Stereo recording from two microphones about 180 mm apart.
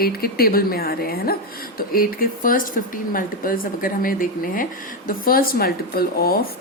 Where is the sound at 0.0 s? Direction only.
55° left (ahead or behind).